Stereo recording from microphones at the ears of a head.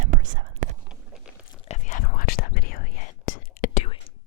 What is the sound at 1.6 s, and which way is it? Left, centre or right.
Whispering, left.